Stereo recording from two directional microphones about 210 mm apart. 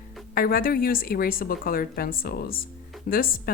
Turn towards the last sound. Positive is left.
turn(degrees=45)  # may be behind; listen again after turning